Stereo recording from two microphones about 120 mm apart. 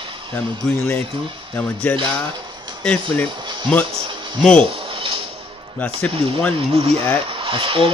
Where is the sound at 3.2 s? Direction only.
40° right (ahead or behind).